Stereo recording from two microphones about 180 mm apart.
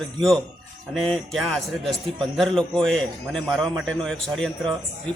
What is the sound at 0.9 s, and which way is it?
A man's voice, centre (ahead or behind).